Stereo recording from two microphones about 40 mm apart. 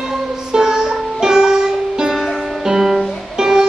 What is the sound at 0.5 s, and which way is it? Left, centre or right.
Music, centre.